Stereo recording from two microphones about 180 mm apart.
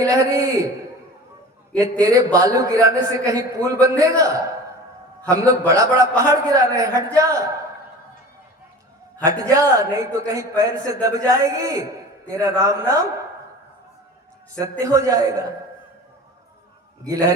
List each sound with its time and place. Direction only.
0.0 s a man's voice: 20° right (ahead or behind)
1.8 s a man's voice: 20° right (ahead or behind)
9.1 s a man's voice: 20° right (ahead or behind)
14.6 s a man's voice: 20° right (ahead or behind)
17.1 s a man's voice: 20° right (ahead or behind)